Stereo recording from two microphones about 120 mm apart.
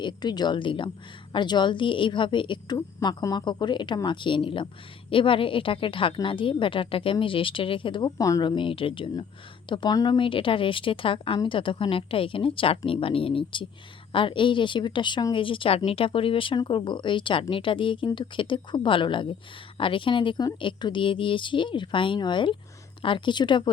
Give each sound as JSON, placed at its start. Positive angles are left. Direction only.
{"t": 0.0, "sound": "speech", "side_deg": 35}
{"t": 8.2, "sound": "speech", "side_deg": 30}